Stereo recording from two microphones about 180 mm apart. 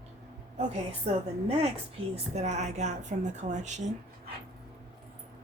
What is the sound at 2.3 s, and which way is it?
A woman's voice, 40° right (ahead or behind).